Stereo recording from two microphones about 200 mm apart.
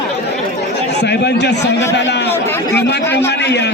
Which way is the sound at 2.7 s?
55° left (ahead or behind).